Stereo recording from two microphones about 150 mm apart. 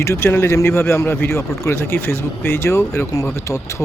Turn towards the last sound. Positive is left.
turn(degrees=20)  # may be behind; listen again after turning